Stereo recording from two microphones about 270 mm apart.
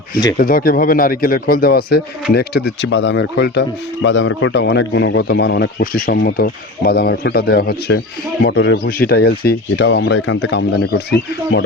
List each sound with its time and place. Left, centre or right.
0.3 s speech: left